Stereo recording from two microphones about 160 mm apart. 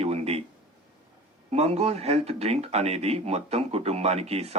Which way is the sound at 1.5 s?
40° right (ahead or behind).